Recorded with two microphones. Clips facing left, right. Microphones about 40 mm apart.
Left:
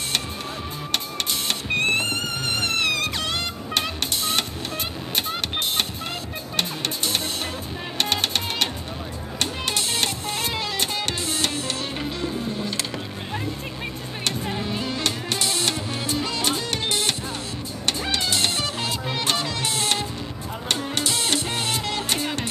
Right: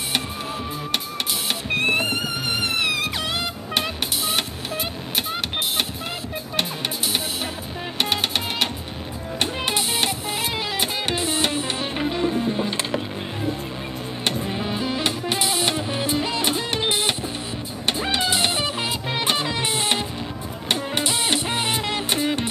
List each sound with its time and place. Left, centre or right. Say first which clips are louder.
1.7 s music: right 1 dB; centre
8.0 s music: right 1 dB; centre
14.4 s music: right 2 dB; centre